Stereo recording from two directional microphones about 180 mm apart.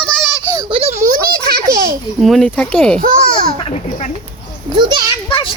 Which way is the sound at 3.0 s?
50° right (ahead or behind).